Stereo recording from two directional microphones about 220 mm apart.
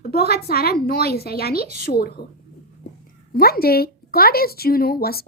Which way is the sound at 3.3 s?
45° left (ahead or behind).